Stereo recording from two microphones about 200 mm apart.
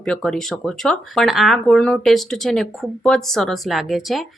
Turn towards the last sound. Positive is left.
turn(degrees=0)  # may be behind; listen again after turning